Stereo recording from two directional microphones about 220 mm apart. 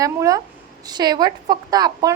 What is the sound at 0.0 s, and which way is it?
Speech, 15° right (ahead or behind).